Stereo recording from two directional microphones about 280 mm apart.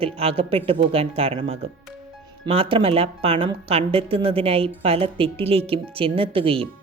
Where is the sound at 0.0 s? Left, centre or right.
Centre.